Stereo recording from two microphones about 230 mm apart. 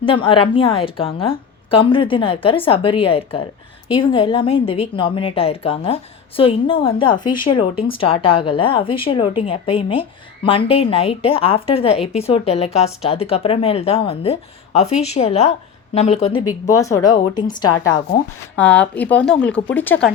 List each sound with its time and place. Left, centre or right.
0.0 s speech: left
16.5 s speech: centre
18.5 s speech: centre